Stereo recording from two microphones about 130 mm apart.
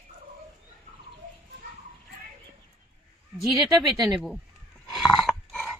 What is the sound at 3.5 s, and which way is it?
Speech, 30° right (ahead or behind).